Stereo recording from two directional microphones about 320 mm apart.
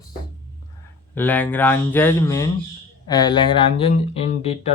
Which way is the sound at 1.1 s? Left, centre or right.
Centre.